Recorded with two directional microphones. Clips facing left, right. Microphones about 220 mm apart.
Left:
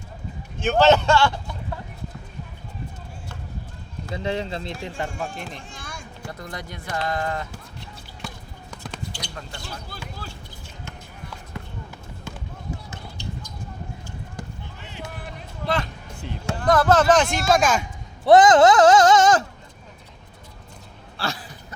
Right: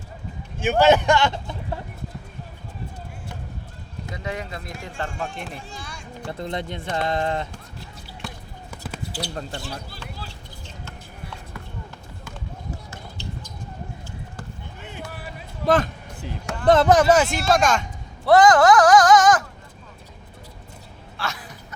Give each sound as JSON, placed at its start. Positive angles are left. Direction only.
{"t": 0.6, "sound": "speech", "side_deg": -10}
{"t": 4.1, "sound": "speech", "side_deg": 30}
{"t": 5.0, "sound": "speech", "side_deg": 5}
{"t": 5.8, "sound": "a sound", "side_deg": 50}
{"t": 6.3, "sound": "speech", "side_deg": -25}
{"t": 7.5, "sound": "drip", "side_deg": 0}
{"t": 8.7, "sound": "basketball bounce", "side_deg": -5}
{"t": 9.3, "sound": "speech", "side_deg": -35}
{"t": 14.8, "sound": "a sound", "side_deg": -50}
{"t": 15.6, "sound": "music", "side_deg": -50}
{"t": 16.6, "sound": "speech", "side_deg": -20}
{"t": 17.5, "sound": "speech", "side_deg": 5}
{"t": 18.3, "sound": "speech", "side_deg": 20}
{"t": 21.2, "sound": "a sound", "side_deg": 30}